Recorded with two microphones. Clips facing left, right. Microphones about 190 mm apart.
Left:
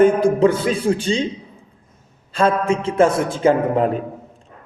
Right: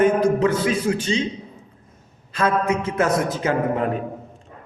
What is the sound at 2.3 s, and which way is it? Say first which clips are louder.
A man's voice: left 3 dB; 30° left (ahead or behind).